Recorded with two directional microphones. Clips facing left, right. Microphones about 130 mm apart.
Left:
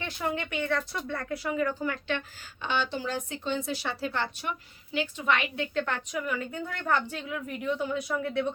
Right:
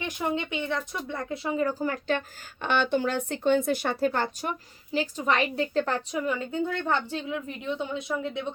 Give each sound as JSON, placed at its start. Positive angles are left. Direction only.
{"t": 0.0, "sound": "speech", "side_deg": -15}
{"t": 2.6, "sound": "speech", "side_deg": -55}